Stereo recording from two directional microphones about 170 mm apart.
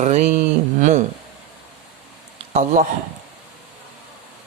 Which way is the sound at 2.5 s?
45° right (ahead or behind).